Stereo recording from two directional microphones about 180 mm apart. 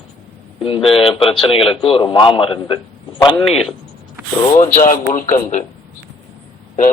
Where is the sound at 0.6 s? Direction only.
30° left (ahead or behind).